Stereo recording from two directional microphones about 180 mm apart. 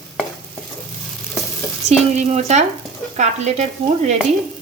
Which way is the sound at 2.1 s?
40° right (ahead or behind).